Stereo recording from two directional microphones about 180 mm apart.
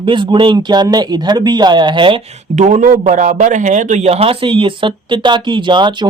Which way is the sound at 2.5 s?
40° right (ahead or behind).